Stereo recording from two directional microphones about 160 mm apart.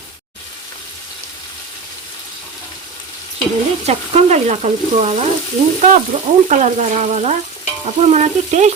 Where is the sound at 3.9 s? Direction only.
40° right (ahead or behind).